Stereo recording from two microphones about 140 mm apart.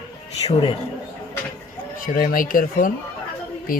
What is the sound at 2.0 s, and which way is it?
Speech, 90° left.